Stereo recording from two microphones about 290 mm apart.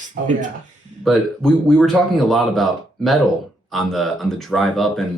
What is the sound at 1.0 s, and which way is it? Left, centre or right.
Speech, centre.